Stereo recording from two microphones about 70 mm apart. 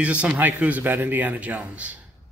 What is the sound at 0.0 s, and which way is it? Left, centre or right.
A man's voice, centre.